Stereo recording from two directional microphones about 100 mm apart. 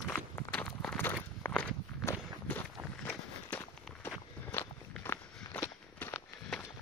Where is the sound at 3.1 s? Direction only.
10° left (ahead or behind).